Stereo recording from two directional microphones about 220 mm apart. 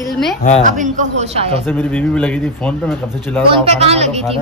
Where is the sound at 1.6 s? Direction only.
5° left (ahead or behind).